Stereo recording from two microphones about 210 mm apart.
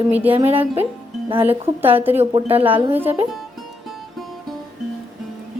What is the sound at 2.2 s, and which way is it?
Speech, 25° right (ahead or behind).